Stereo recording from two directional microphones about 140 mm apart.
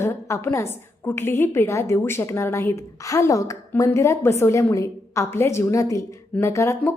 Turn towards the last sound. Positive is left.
turn(degrees=20)  # may be behind; listen again after turning